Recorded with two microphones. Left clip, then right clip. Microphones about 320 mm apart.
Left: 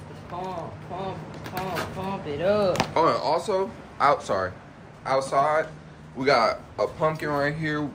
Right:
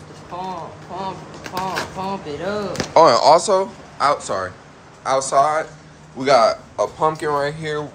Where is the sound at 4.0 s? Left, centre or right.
Centre.